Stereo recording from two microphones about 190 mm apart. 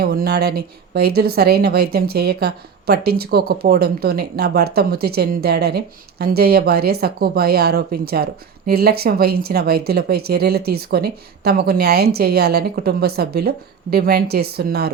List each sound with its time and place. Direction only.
0.0 s speech: 55° right (ahead or behind)